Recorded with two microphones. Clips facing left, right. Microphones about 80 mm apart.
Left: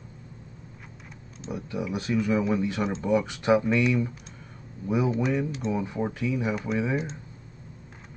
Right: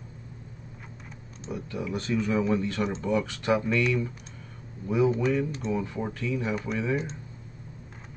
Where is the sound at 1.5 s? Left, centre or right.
Centre.